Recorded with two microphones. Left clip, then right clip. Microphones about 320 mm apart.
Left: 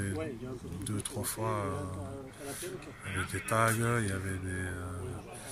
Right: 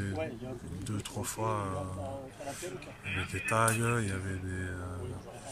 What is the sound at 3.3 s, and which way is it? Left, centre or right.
Speech, centre.